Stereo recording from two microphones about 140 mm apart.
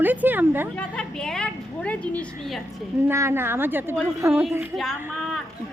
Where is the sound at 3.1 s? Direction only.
20° right (ahead or behind).